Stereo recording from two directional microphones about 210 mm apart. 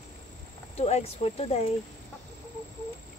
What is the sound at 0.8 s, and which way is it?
Speech, 30° left (ahead or behind).